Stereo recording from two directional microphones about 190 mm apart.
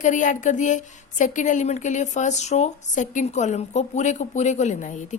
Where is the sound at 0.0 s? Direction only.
40° left (ahead or behind).